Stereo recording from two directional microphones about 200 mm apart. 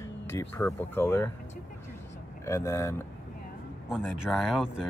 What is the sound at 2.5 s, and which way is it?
Speech, 15° left (ahead or behind).